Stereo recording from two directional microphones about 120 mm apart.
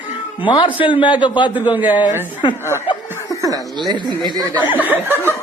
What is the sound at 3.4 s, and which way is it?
Speech, 35° right (ahead or behind).